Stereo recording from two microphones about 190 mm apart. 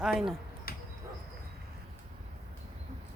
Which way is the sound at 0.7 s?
50° left (ahead or behind).